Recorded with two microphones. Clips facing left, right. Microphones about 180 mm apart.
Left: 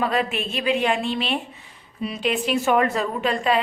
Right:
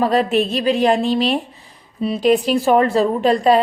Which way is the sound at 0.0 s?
35° right (ahead or behind).